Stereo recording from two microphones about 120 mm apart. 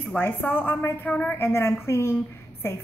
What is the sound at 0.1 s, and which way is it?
A woman's voice, 15° left (ahead or behind).